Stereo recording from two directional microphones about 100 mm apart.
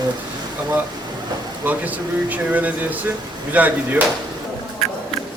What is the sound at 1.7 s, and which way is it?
Speech, 15° right (ahead or behind).